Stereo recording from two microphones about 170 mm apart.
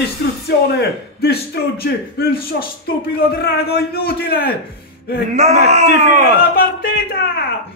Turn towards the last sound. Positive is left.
turn(degrees=65)  # may be behind; listen again after turning